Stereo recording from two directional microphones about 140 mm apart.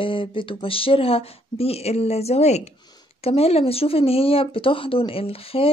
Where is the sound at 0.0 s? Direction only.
40° left (ahead or behind).